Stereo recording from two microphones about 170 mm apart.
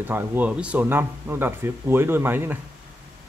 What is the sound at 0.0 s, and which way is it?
Speech, 10° right (ahead or behind).